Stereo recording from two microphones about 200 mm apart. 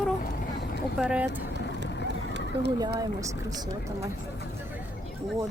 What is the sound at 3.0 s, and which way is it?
Speech, 15° right (ahead or behind).